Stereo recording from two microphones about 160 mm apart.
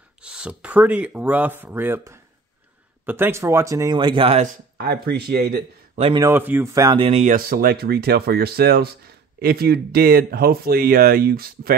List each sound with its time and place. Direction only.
0.2 s speech: 5° right (ahead or behind); by 4.4 s 35° right (ahead or behind)
4.7 s speech: 75° right (ahead or behind)
5.9 s speech: 35° right (ahead or behind)
6.2 s speech: 15° right (ahead or behind)
7.0 s speech: 40° right (ahead or behind)
7.3 s speech: 70° right (ahead or behind)